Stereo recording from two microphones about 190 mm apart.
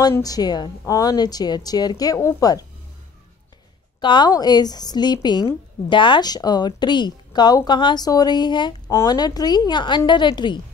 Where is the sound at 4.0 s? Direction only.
25° left (ahead or behind).